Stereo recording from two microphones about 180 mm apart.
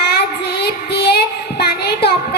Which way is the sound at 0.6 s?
60° left (ahead or behind).